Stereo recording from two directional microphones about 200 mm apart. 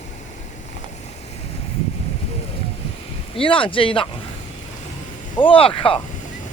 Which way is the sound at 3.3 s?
25° left (ahead or behind).